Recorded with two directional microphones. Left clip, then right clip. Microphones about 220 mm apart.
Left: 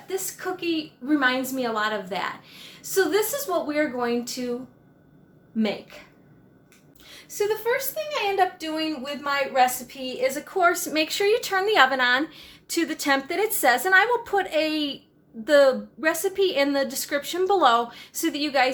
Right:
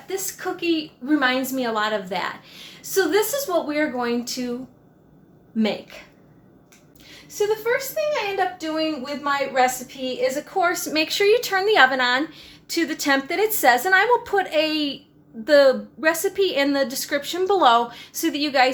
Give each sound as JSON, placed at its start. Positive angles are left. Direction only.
{"t": 0.1, "sound": "a woman's voice", "side_deg": 0}
{"t": 5.5, "sound": "a woman's voice", "side_deg": 0}
{"t": 7.0, "sound": "a sound", "side_deg": 5}
{"t": 8.4, "sound": "a woman's voice", "side_deg": 20}